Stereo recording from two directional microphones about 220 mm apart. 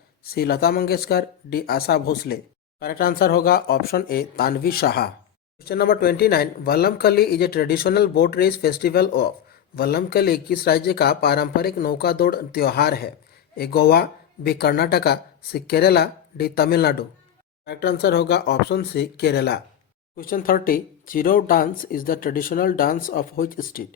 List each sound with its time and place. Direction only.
0.3 s speech: 45° left (ahead or behind)